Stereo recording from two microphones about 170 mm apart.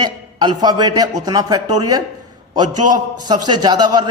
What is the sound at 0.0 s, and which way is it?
A man's voice, 25° right (ahead or behind).